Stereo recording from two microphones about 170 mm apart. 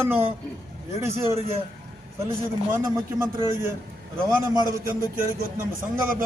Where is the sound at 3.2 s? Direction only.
15° right (ahead or behind).